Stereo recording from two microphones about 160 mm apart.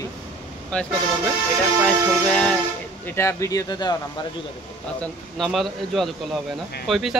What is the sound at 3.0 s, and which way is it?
Speech, 15° left (ahead or behind).